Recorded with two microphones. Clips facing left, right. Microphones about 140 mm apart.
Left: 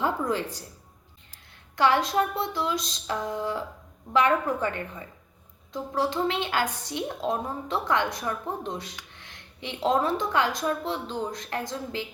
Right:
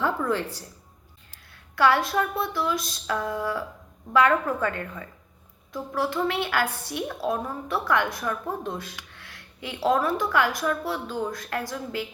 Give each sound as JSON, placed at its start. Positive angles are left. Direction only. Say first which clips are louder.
{"t": 0.0, "sound": "music", "louder": "right 1 dB", "side_deg": 15}
{"t": 1.7, "sound": "a woman's voice", "louder": "right 1 dB", "side_deg": 20}